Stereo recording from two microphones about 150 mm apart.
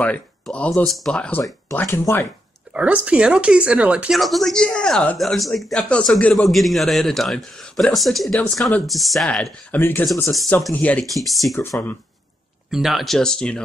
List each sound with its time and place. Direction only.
0.0 s speech: 10° left (ahead or behind)
1.4 s speech: 15° left (ahead or behind)
2.7 s speech: 10° right (ahead or behind)
12.7 s speech: centre (ahead or behind)